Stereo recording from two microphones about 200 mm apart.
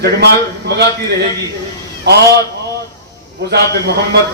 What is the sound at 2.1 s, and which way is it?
Speech, 55° right (ahead or behind).